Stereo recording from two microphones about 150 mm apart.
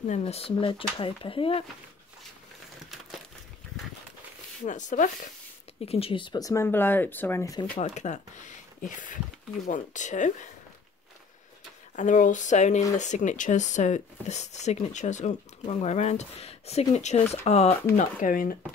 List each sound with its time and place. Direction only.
0.2 s speech: 40° left (ahead or behind)
4.6 s speech: 55° left (ahead or behind)
5.9 s speech: 40° left (ahead or behind); by 7.6 s 20° left (ahead or behind)
7.8 s speech: 50° left (ahead or behind)
11.9 s speech: 55° left (ahead or behind)
17.9 s speech: 65° left (ahead or behind)